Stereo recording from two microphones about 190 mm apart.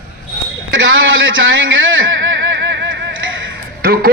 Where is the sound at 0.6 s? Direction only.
90° right.